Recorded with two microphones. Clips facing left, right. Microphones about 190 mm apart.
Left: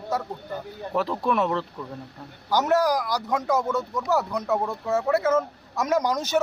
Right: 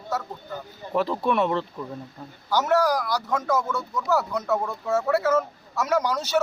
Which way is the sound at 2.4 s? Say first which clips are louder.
Even; 15° left (ahead or behind).